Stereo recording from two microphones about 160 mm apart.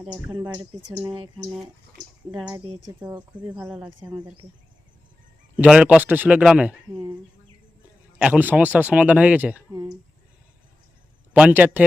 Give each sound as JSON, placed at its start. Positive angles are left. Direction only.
{"t": 0.3, "sound": "speech", "side_deg": -25}
{"t": 2.3, "sound": "speech", "side_deg": -30}
{"t": 3.6, "sound": "speech", "side_deg": -10}
{"t": 4.4, "sound": "speech", "side_deg": -40}
{"t": 5.5, "sound": "speech", "side_deg": -5}
{"t": 8.2, "sound": "speech", "side_deg": -10}
{"t": 9.7, "sound": "speech", "side_deg": -25}
{"t": 11.3, "sound": "speech", "side_deg": -10}